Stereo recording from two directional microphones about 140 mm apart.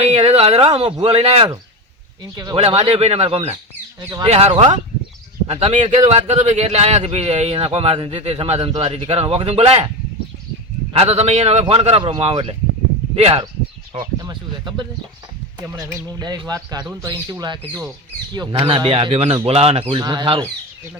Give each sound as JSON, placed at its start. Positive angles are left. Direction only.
{"t": 0.0, "sound": "speech", "side_deg": -45}
{"t": 2.3, "sound": "speech", "side_deg": -30}
{"t": 2.6, "sound": "speech", "side_deg": -45}
{"t": 10.9, "sound": "speech", "side_deg": -45}
{"t": 14.0, "sound": "speech", "side_deg": -30}
{"t": 16.1, "sound": "speech", "side_deg": -30}
{"t": 20.0, "sound": "speech", "side_deg": -30}